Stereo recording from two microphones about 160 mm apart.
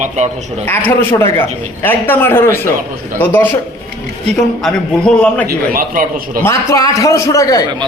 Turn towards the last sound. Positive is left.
turn(degrees=20)  # may be behind; listen again after turning